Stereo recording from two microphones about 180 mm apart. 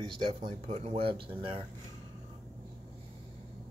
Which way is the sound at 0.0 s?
35° right (ahead or behind).